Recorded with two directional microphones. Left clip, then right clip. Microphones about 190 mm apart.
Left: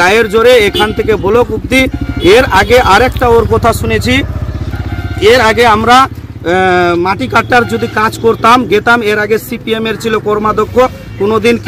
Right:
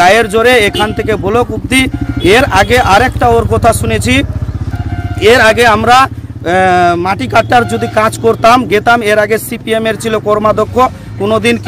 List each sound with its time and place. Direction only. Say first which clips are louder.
0.0 s speech: even; 30° right (ahead or behind)